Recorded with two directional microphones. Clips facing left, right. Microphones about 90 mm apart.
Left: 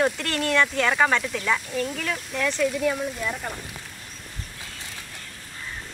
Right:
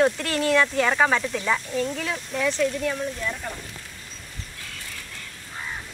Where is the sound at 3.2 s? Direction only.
10° left (ahead or behind).